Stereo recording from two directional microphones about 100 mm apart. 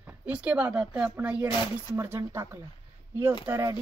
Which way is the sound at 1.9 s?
25° right (ahead or behind).